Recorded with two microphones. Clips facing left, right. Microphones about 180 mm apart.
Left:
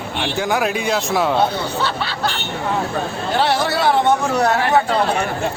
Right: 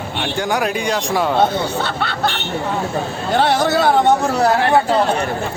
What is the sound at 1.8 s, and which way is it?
Speech, 55° right (ahead or behind).